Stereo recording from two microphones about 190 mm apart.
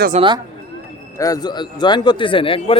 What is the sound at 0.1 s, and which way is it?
Speech, 35° right (ahead or behind).